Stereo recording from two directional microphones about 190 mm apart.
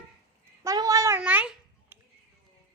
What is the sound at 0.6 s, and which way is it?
A child's voice, 20° right (ahead or behind).